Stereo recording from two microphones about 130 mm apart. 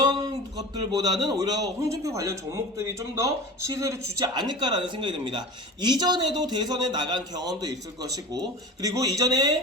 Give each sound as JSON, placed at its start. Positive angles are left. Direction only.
{"t": 0.0, "sound": "a man's voice", "side_deg": -35}